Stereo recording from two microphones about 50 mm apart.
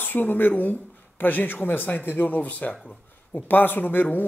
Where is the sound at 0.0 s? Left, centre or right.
Left.